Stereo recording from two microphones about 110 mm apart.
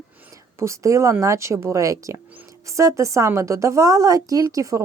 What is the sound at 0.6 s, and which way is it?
A woman's voice, 30° right (ahead or behind).